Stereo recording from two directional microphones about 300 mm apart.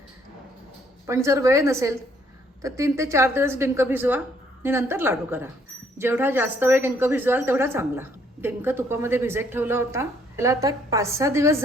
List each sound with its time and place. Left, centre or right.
1.0 s speech: centre